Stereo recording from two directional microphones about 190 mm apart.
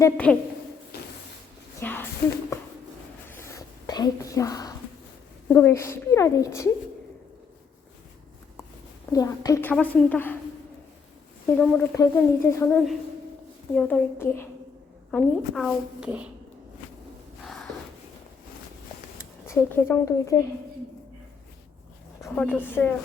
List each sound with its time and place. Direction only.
0.0 s speech: 5° left (ahead or behind)
1.8 s speech: 10° left (ahead or behind)
3.2 s whispering: 15° left (ahead or behind)
5.5 s speech: 10° left (ahead or behind)
9.1 s speech: 20° left (ahead or behind)
11.4 s speech: 5° left (ahead or behind)
12.7 s a woman's voice: centre (ahead or behind)
17.4 s a sound: centre (ahead or behind)
19.5 s speech: 15° left (ahead or behind)
22.4 s speech: 10° left (ahead or behind)